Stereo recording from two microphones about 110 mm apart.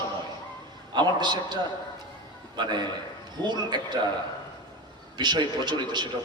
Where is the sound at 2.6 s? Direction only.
40° right (ahead or behind).